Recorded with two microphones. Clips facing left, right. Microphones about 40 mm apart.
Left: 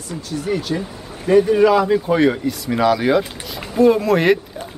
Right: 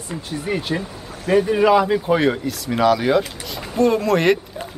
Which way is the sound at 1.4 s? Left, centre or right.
Centre.